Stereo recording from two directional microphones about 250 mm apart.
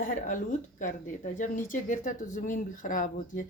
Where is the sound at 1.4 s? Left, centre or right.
Left.